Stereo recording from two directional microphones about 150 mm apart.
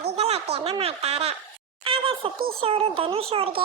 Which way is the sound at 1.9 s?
35° right (ahead or behind).